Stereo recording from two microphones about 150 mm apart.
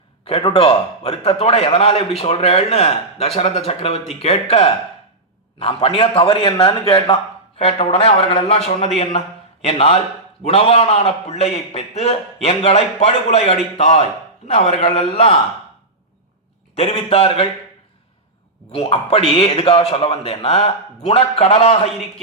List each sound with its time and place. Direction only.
0.3 s a man's voice: 40° left (ahead or behind)
16.7 s a man's voice: 45° left (ahead or behind)
18.7 s a man's voice: 40° left (ahead or behind)